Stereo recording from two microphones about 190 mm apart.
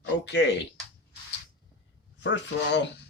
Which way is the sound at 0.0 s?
65° left (ahead or behind).